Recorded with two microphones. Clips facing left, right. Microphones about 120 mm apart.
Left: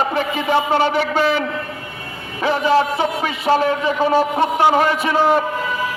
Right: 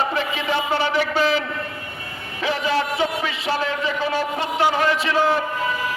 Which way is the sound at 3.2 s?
50° left (ahead or behind).